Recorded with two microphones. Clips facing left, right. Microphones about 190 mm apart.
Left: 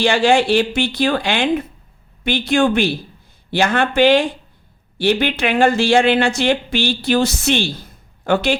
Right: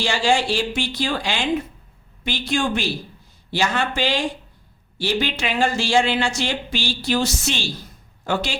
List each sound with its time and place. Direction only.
0.0 s speech: 60° left (ahead or behind)